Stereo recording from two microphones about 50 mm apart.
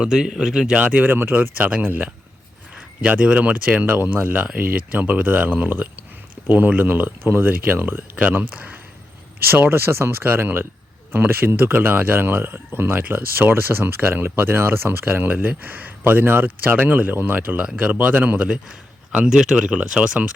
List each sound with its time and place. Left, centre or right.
0.0 s speech: centre
0.8 s speech: right
1.0 s speech: right
9.4 s speech: right
10.2 s speech: right
19.1 s speech: centre